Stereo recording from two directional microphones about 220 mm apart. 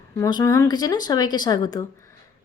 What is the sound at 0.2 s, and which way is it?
A woman's voice, 15° left (ahead or behind).